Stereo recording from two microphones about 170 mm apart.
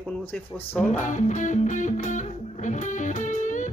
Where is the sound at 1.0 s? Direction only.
45° left (ahead or behind).